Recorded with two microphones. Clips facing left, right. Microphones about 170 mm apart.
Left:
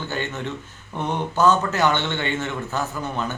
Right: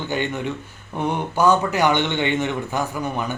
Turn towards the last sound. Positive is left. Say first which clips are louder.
# right 2 dB
turn(degrees=-15)  # may be behind; listen again after turning